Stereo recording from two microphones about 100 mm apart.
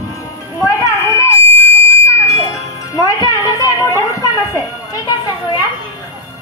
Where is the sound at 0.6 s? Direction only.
35° left (ahead or behind).